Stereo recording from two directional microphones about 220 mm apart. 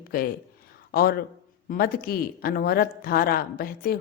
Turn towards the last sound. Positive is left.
turn(degrees=45)  # may be behind; listen again after turning